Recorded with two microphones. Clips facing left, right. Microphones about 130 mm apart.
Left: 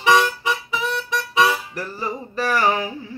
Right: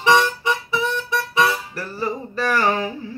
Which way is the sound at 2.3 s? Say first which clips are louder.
Left 1 dB; 15° left (ahead or behind).